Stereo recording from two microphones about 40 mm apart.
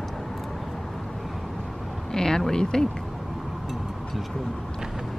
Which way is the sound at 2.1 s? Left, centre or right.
Centre.